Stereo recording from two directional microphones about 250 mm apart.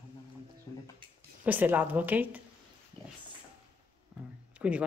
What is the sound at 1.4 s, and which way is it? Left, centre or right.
Speech, centre.